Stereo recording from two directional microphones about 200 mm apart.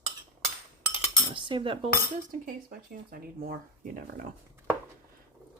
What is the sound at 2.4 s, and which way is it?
Speech, 45° right (ahead or behind).